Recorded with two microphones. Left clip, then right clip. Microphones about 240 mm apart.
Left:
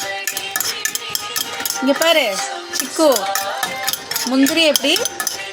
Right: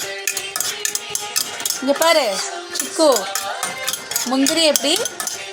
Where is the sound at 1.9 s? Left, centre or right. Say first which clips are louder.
Left 1 dB; centre.